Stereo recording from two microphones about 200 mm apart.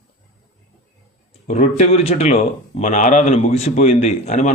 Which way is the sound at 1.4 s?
30° left (ahead or behind).